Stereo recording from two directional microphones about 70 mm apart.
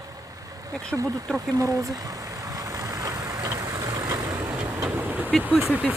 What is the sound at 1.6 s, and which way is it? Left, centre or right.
Vehicle, right.